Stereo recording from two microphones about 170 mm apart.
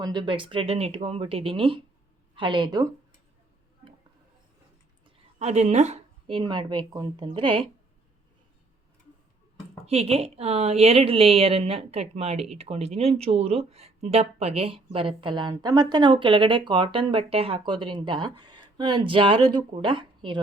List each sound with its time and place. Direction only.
0.0 s a woman's voice: 25° right (ahead or behind)
5.4 s a woman's voice: 40° right (ahead or behind)
9.8 s a woman's voice: 35° right (ahead or behind)